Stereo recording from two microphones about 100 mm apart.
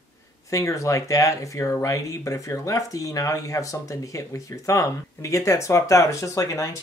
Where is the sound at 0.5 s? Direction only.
30° left (ahead or behind).